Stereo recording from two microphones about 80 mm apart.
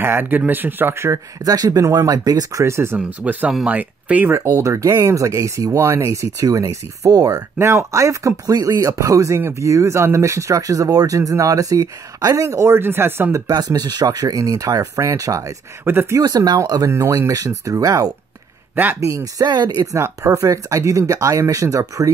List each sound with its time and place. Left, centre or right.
0.0 s speech: right
1.4 s speech: right
2.6 s speech: right
3.0 s speech: centre
4.4 s speech: right
7.5 s speech: right
13.5 s speech: right
15.8 s speech: right
16.2 s speech: right
16.9 s speech: right
17.6 s speech: right
19.4 s speech: right
19.8 s speech: right